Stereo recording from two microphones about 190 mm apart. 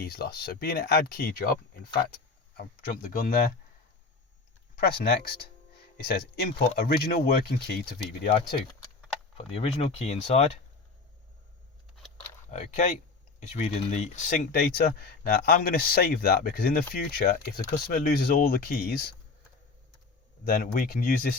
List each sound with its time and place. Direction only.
0.0 s speech: 55° left (ahead or behind)
4.8 s speech: 55° left (ahead or behind)
9.6 s speech: 30° left (ahead or behind)
12.5 s speech: 40° left (ahead or behind)
14.5 s speech: 55° left (ahead or behind)
20.4 s speech: 50° left (ahead or behind)